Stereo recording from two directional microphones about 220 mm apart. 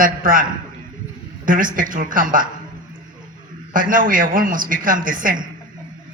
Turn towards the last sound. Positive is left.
turn(degrees=-40)  # may be behind; listen again after turning